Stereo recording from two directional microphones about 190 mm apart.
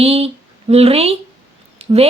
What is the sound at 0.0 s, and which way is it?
Speech, 30° right (ahead or behind).